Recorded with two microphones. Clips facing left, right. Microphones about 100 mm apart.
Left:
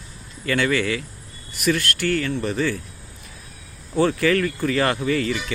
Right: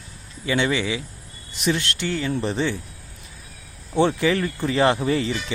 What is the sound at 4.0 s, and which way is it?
Speech, 25° right (ahead or behind).